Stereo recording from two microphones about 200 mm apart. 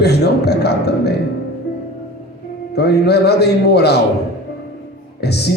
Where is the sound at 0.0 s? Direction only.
55° left (ahead or behind).